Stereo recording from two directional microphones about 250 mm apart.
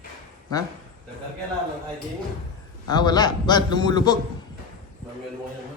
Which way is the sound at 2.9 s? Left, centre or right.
Centre.